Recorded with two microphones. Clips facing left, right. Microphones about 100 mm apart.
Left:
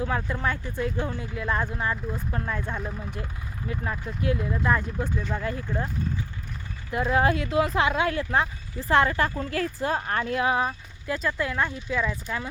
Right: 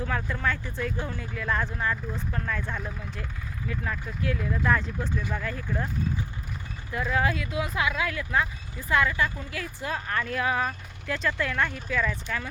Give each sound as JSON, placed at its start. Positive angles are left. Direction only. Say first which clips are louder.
{"t": 0.0, "sound": "speech", "louder": "left 2 dB", "side_deg": 20}
{"t": 2.3, "sound": "speech", "louder": "left 1 dB", "side_deg": 25}
{"t": 5.3, "sound": "speech", "louder": "left 3 dB", "side_deg": 30}
{"t": 6.9, "sound": "speech", "louder": "left 4 dB", "side_deg": 30}
{"t": 9.8, "sound": "speech", "louder": "left 1 dB", "side_deg": 35}
{"t": 11.1, "sound": "speech", "louder": "left 1 dB", "side_deg": 10}